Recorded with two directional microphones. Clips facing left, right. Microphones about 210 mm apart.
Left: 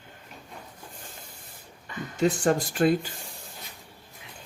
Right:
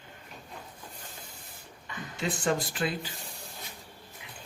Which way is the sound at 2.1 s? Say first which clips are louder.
Left 6 dB; 45° left (ahead or behind).